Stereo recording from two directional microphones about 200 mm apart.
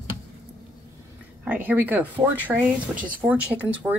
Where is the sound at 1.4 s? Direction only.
10° right (ahead or behind).